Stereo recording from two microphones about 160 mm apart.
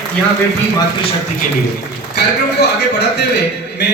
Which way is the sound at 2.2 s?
90° left.